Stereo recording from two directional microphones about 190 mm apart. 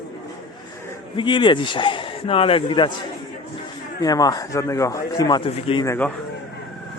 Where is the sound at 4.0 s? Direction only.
20° left (ahead or behind).